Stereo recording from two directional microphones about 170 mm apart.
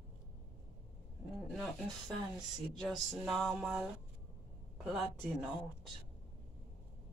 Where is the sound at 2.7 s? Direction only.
Centre (ahead or behind).